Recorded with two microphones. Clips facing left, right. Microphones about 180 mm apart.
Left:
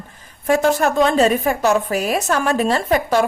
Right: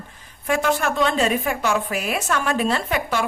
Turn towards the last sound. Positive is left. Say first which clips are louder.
# left 7 dB
turn(degrees=40)  # may be behind; listen again after turning